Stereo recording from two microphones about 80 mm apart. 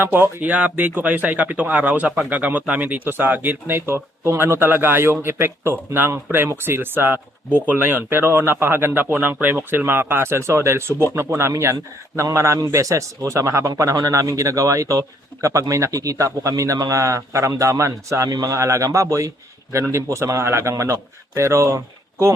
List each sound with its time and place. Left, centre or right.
0.0 s a man's voice: right